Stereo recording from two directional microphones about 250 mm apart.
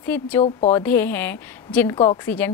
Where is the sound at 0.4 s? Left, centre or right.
Left.